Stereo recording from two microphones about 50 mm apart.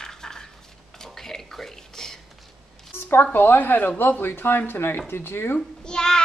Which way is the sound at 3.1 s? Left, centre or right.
Left.